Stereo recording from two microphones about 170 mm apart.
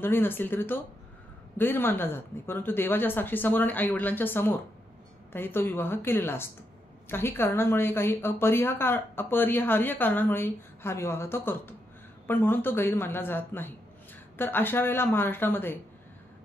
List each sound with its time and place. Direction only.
0.0 s a woman's voice: 10° left (ahead or behind)